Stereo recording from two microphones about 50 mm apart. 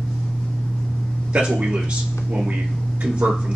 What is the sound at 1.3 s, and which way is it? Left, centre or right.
Speech, centre.